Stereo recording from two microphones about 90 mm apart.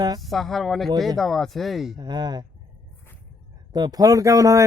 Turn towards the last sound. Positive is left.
turn(degrees=-35)  # may be behind; listen again after turning